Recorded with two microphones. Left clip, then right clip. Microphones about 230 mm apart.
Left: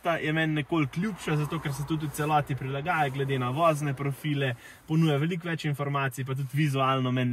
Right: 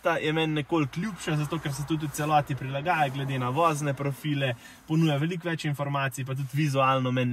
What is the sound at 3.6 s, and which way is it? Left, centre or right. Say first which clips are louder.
Speech: even; right.